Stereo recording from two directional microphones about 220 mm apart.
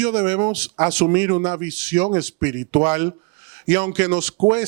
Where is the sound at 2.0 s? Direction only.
25° right (ahead or behind).